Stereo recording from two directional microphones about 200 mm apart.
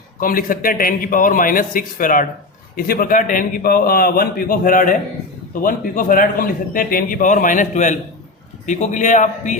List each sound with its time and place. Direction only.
0.2 s a man's voice: 45° left (ahead or behind)